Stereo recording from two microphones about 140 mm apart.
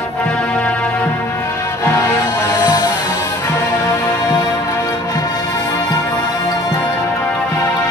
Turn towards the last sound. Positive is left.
turn(degrees=30)  # may be behind; listen again after turning